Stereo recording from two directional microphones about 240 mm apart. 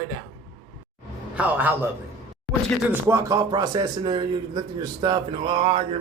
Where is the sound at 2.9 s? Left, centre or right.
Centre.